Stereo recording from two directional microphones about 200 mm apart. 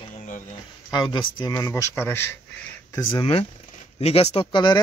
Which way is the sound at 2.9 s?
25° left (ahead or behind).